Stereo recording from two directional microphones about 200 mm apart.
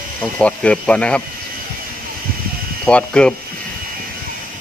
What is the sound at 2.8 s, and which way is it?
Speech, 5° left (ahead or behind).